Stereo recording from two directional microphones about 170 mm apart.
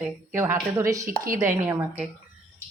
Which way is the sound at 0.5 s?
20° right (ahead or behind).